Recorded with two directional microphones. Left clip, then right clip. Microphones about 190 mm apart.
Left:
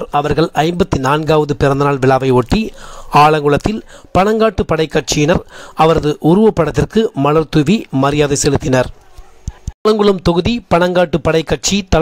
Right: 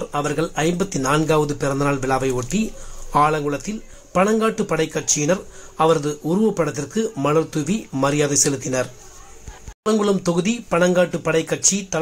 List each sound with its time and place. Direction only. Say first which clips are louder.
0.0 s speech: left 8 dB; 45° left (ahead or behind)
9.8 s speech: left 8 dB; 45° left (ahead or behind)